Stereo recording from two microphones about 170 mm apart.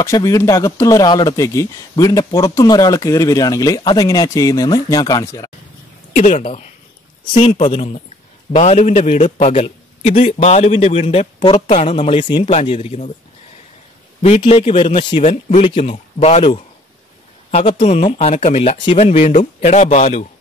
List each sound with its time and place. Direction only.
0.0 s speech: 20° left (ahead or behind)
6.1 s a man's voice: 45° left (ahead or behind); by 11.6 s 30° left (ahead or behind)
11.6 s a man's voice: 40° left (ahead or behind)
14.2 s a man's voice: 35° left (ahead or behind)